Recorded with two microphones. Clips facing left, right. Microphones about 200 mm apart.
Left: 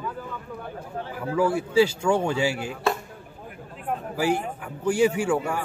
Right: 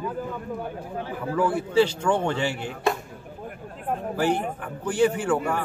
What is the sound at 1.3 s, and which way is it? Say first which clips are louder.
Speech: left 1 dB; 10° left (ahead or behind).